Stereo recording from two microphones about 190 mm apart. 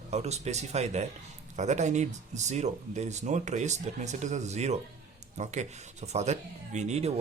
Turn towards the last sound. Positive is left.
turn(degrees=-35)  # may be behind; listen again after turning